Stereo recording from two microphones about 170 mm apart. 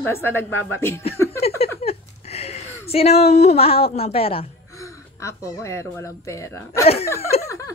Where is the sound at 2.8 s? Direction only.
35° left (ahead or behind).